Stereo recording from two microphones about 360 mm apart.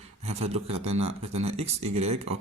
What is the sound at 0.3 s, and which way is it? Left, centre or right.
Speech, centre.